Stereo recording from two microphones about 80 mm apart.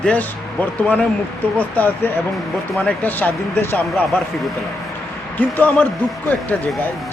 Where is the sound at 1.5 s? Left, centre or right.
Centre.